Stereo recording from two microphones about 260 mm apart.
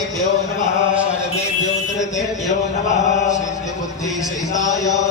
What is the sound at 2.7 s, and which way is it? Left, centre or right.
Chant, left.